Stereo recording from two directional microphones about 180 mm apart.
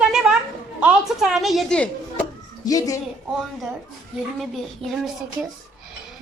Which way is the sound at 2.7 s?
20° left (ahead or behind).